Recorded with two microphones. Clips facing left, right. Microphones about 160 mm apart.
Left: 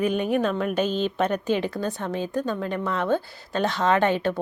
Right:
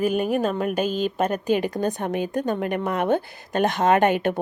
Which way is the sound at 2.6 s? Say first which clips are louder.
Right 3 dB; 55° right (ahead or behind).